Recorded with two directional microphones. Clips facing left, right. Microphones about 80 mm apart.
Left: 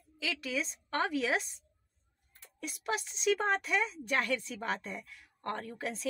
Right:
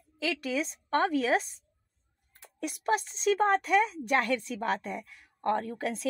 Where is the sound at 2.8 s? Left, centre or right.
Right.